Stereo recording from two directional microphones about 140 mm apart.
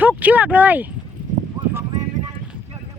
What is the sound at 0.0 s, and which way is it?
Speech, 10° right (ahead or behind).